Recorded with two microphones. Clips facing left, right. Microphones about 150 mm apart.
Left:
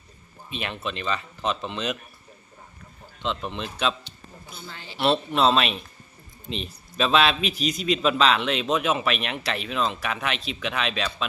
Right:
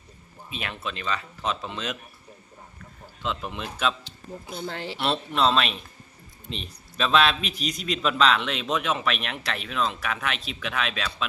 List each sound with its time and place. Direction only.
0.5 s a man's voice: centre (ahead or behind)
3.2 s a man's voice: 5° right (ahead or behind)
4.6 s a man's voice: 75° right (ahead or behind)
4.9 s a man's voice: 5° left (ahead or behind)